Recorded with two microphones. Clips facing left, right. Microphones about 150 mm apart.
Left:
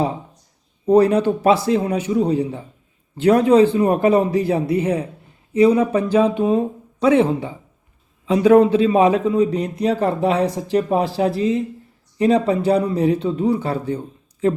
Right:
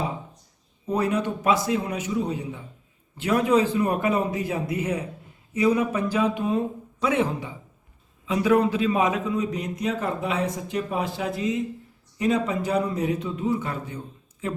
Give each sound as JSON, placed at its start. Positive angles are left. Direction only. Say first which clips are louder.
{"t": 0.9, "sound": "a man's voice", "louder": "left 10 dB", "side_deg": 35}